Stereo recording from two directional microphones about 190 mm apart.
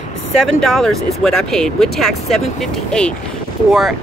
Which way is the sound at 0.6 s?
Centre (ahead or behind).